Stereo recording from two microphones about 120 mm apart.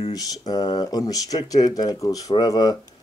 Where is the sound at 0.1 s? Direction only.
30° left (ahead or behind).